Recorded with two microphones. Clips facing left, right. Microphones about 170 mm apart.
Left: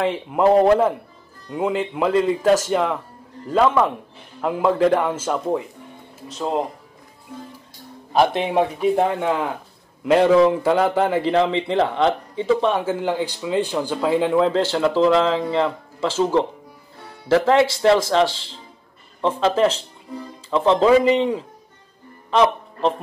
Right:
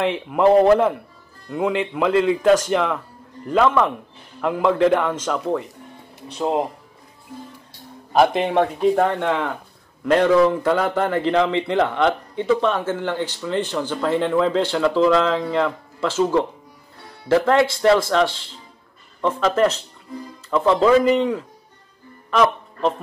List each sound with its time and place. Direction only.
0.0 s a man's voice: centre (ahead or behind)
6.3 s speech: 10° right (ahead or behind)
8.1 s a man's voice: centre (ahead or behind)
20.5 s speech: 25° left (ahead or behind)
22.3 s speech: 30° left (ahead or behind)